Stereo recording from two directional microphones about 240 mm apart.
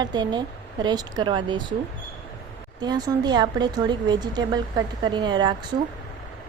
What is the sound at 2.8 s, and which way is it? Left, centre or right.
A woman's voice, centre.